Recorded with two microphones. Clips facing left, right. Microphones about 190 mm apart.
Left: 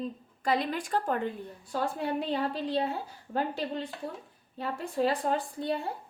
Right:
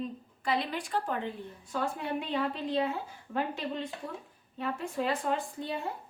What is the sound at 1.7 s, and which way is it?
A woman's voice, 35° left (ahead or behind).